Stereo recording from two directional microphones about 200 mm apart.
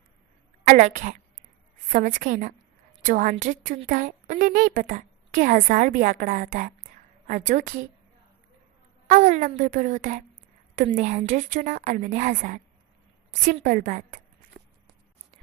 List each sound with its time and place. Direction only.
0.6 s a woman's voice: 40° right (ahead or behind)
9.0 s a woman's voice: 40° right (ahead or behind)